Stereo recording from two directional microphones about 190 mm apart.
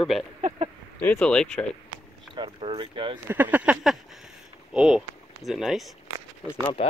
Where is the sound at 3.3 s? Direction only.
10° right (ahead or behind).